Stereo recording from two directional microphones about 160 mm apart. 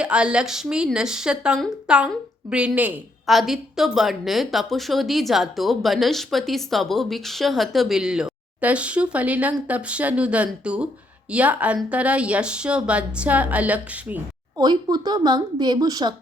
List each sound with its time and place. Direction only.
0.0 s a woman's voice: 5° right (ahead or behind)
14.6 s a woman's voice: 25° right (ahead or behind)